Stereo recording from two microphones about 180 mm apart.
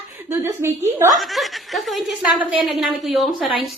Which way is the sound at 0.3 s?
15° right (ahead or behind).